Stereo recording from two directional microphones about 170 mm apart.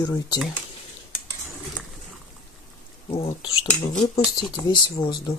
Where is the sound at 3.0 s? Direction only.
30° left (ahead or behind).